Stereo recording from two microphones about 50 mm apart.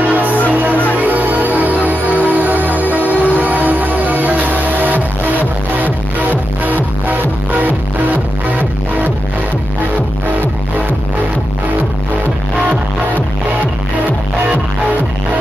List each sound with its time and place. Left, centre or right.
0.1 s music: right